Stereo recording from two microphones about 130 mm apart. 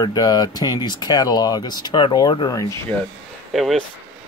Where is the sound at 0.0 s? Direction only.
30° left (ahead or behind).